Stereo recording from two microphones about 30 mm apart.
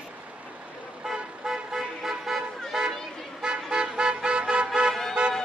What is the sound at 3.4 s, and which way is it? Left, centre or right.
Vehicle, right.